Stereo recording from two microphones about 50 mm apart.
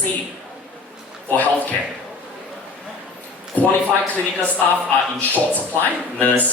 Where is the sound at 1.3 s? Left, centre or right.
Left.